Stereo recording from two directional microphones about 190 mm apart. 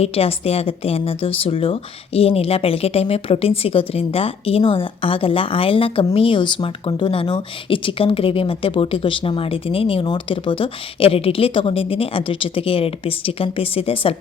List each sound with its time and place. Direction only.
0.0 s a woman's voice: 30° left (ahead or behind)